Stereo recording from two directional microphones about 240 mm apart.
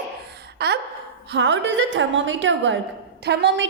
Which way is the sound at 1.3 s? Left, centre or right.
Right.